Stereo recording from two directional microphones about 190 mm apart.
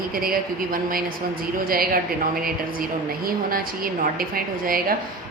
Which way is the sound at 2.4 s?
50° right (ahead or behind).